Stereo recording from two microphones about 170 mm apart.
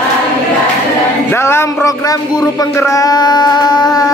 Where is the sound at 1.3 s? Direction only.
15° left (ahead or behind).